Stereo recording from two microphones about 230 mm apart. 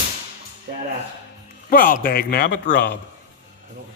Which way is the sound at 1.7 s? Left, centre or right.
Left.